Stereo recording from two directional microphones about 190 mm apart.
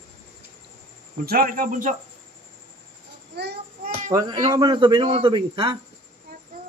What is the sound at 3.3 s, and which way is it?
Child singing, 60° right (ahead or behind).